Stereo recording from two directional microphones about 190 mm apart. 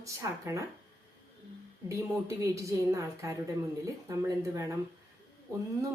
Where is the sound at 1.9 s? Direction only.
15° right (ahead or behind).